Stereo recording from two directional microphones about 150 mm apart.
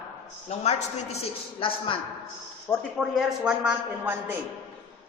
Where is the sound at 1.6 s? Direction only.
35° left (ahead or behind).